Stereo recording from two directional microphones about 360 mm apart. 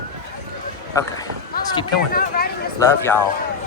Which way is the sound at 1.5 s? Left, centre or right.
Left.